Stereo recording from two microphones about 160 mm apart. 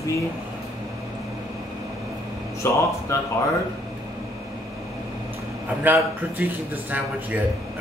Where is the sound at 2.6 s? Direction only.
15° left (ahead or behind).